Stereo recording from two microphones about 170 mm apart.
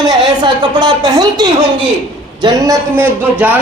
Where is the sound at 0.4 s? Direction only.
25° right (ahead or behind).